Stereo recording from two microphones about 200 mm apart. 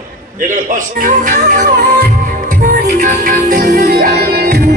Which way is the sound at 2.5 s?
40° right (ahead or behind).